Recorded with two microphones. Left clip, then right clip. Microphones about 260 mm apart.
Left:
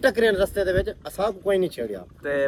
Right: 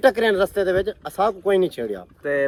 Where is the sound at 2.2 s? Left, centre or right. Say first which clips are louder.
Right 2 dB; centre.